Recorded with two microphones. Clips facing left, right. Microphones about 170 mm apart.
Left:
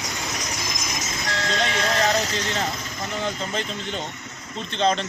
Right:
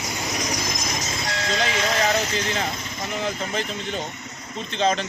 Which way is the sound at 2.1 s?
40° left (ahead or behind).